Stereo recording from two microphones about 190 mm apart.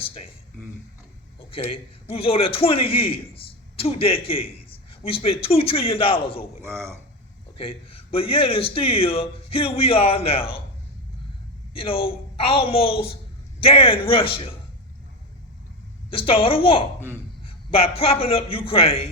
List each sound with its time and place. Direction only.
0.0 s a man's voice: 30° left (ahead or behind)
1.5 s a man's voice: 30° left (ahead or behind)
6.6 s a man's voice: 15° right (ahead or behind)
7.6 s a man's voice: 30° left (ahead or behind)
11.7 s a man's voice: 30° left (ahead or behind)
16.0 s a man's voice: 30° left (ahead or behind)